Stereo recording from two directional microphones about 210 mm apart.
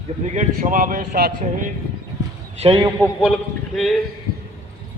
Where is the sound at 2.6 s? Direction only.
25° right (ahead or behind).